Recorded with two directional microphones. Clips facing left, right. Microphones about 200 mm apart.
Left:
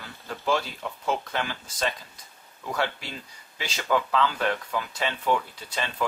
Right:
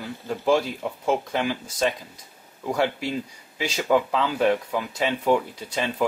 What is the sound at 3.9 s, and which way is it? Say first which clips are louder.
Speech: right 4 dB; 20° right (ahead or behind).